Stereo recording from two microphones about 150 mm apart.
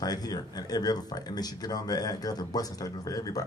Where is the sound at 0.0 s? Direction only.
25° left (ahead or behind).